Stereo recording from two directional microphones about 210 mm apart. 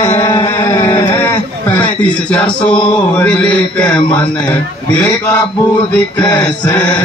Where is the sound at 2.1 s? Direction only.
5° left (ahead or behind).